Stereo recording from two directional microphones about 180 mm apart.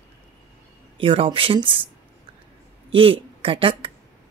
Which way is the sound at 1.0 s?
30° right (ahead or behind).